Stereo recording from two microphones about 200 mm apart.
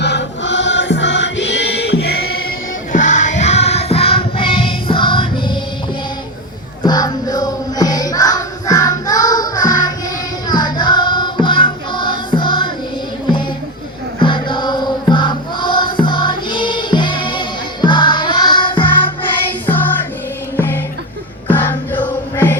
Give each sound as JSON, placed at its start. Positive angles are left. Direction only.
{"t": 0.0, "sound": "music", "side_deg": 60}
{"t": 2.9, "sound": "music", "side_deg": 40}
{"t": 6.8, "sound": "music", "side_deg": 20}
{"t": 14.2, "sound": "music", "side_deg": 25}
{"t": 21.5, "sound": "music", "side_deg": 10}